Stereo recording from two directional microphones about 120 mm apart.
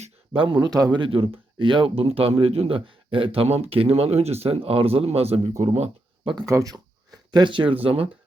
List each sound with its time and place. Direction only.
0.3 s speech: 45° right (ahead or behind); by 5.9 s 65° right (ahead or behind)
6.4 s speech: 25° right (ahead or behind)
7.3 s speech: 40° right (ahead or behind)